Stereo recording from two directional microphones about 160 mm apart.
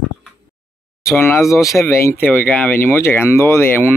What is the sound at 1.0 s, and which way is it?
Speech, 15° left (ahead or behind).